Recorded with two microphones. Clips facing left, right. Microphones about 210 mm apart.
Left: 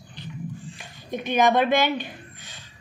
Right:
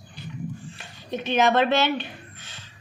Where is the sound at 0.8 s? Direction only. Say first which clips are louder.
Even; 15° left (ahead or behind).